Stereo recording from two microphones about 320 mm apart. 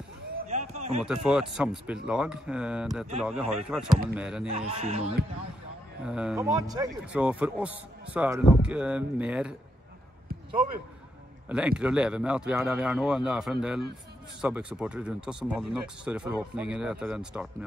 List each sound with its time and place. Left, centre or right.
0.5 s a sound: right
1.0 s speech: centre
4.5 s speech: centre
6.0 s speech: centre
11.4 s speech: centre